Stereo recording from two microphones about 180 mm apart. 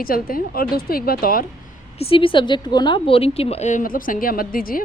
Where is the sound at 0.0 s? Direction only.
55° left (ahead or behind).